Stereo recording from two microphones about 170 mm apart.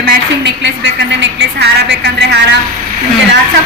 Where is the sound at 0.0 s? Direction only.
90° right.